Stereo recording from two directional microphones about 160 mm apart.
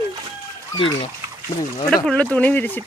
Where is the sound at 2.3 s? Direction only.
10° left (ahead or behind).